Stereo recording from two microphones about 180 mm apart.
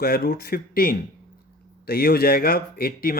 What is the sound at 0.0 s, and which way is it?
Speech, 55° left (ahead or behind).